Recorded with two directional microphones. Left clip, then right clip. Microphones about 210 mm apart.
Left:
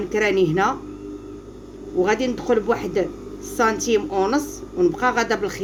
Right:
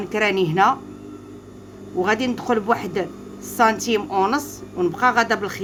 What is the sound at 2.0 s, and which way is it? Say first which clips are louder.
Speech: even; 20° right (ahead or behind).